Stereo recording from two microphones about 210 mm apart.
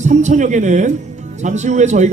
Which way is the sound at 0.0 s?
35° right (ahead or behind).